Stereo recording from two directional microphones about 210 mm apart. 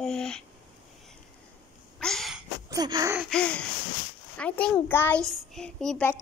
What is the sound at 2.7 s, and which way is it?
Gasp, 20° right (ahead or behind).